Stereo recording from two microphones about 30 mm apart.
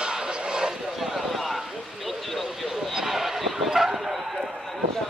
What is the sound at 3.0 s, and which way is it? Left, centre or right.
Vehicle, centre.